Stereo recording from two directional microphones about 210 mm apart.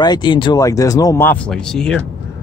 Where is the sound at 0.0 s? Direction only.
20° left (ahead or behind); by 2.0 s 5° left (ahead or behind).